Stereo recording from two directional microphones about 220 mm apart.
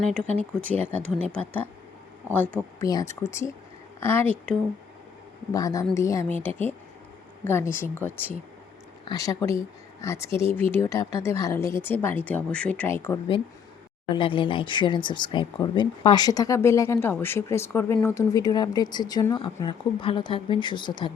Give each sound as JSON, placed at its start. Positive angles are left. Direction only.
{"t": 0.0, "sound": "speech", "side_deg": 5}
{"t": 5.5, "sound": "speech", "side_deg": 15}
{"t": 14.1, "sound": "speech", "side_deg": 25}